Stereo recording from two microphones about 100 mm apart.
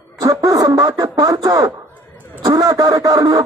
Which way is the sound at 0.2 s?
40° right (ahead or behind).